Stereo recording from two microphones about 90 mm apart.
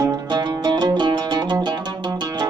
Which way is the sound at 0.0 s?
55° right (ahead or behind).